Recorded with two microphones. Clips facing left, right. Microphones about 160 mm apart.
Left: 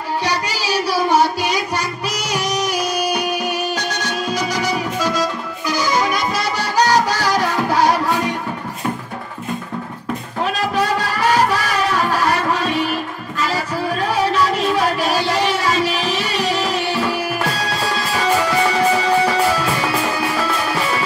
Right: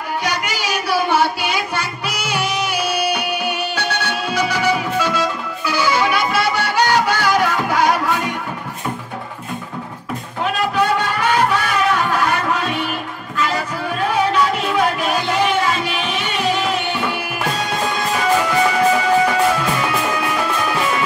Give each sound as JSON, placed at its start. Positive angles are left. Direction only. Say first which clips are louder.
{"t": 0.2, "sound": "child singing", "louder": "left 1 dB", "side_deg": 30}
{"t": 10.4, "sound": "music", "louder": "right 1 dB", "side_deg": 35}